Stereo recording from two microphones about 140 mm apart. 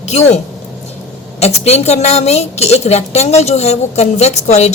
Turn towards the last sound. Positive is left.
turn(degrees=50)  # may be behind; listen again after turning